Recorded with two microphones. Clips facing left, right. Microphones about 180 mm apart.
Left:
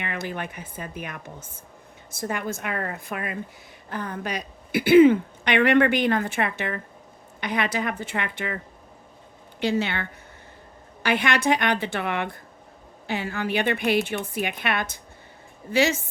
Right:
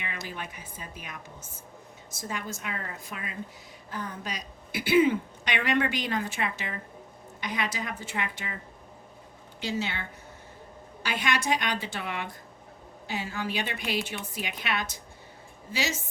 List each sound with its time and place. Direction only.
0.0 s speech: 60° left (ahead or behind)
9.6 s speech: 60° left (ahead or behind)